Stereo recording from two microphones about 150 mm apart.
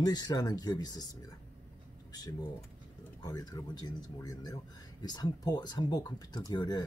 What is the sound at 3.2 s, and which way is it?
Mantra, 25° left (ahead or behind).